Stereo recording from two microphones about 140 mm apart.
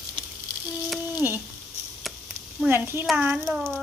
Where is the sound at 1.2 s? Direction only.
15° right (ahead or behind).